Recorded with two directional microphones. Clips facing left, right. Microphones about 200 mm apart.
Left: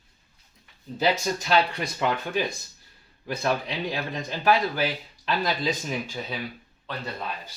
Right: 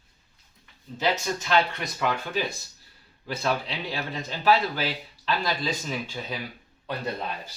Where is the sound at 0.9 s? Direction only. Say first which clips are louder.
Left 2 dB; 35° left (ahead or behind).